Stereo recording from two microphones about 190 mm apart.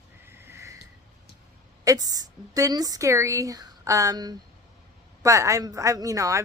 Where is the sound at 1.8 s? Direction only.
20° right (ahead or behind).